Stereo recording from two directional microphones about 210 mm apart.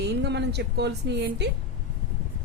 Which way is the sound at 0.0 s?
55° right (ahead or behind).